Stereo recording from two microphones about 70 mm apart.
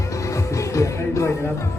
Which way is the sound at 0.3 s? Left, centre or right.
Left.